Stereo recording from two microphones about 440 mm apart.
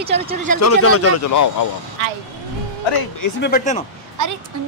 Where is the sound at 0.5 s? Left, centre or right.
Left.